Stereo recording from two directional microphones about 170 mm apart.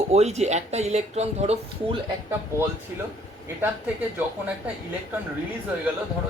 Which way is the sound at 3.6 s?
10° right (ahead or behind).